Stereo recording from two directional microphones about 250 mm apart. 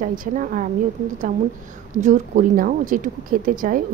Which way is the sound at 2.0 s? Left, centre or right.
Right.